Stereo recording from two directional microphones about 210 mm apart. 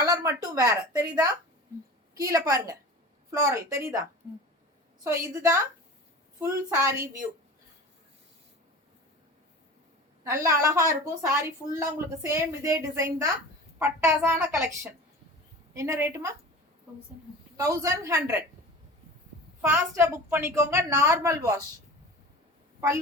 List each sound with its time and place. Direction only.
0.0 s a sound: 15° right (ahead or behind)
0.4 s a woman's voice: 15° right (ahead or behind)
2.1 s a woman's voice: 15° right (ahead or behind)
5.0 s a woman's voice: 15° right (ahead or behind)
10.2 s a woman's voice: 15° right (ahead or behind)
17.6 s a woman's voice: 15° right (ahead or behind)
19.6 s a woman's voice: 15° right (ahead or behind)